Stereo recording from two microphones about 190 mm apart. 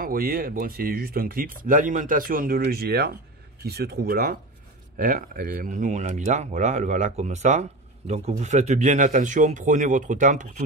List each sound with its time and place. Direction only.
0.0 s speech: 50° right (ahead or behind)